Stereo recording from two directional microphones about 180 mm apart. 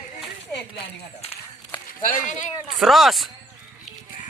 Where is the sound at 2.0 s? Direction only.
45° left (ahead or behind).